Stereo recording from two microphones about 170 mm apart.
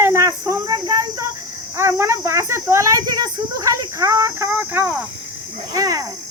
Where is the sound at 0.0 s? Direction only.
15° right (ahead or behind).